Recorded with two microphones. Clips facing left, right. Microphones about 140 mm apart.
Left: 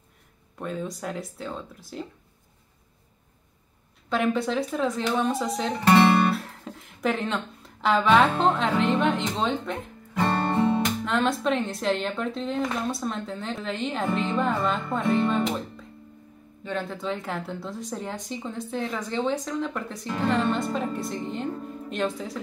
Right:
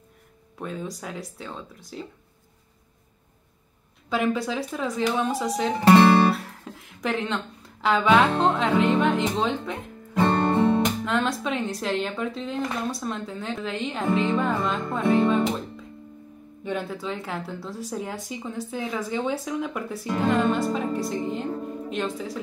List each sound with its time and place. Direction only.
0.6 s speech: centre (ahead or behind)
4.1 s speech: centre (ahead or behind)
6.3 s music: centre (ahead or behind)
8.4 s speech: centre (ahead or behind)
10.1 s music: 20° right (ahead or behind)
11.1 s speech: centre (ahead or behind)
16.6 s speech: 5° right (ahead or behind)